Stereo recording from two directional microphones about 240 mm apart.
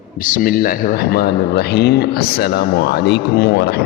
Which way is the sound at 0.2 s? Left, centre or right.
Left.